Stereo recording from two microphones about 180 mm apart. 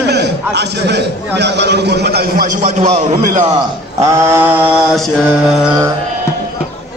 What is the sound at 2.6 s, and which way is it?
Speech, 40° right (ahead or behind).